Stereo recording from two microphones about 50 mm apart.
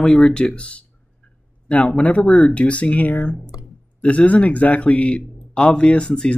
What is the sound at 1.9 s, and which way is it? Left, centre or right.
Speech, left.